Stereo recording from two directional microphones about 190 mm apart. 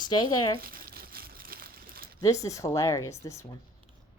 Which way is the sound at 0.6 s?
50° right (ahead or behind).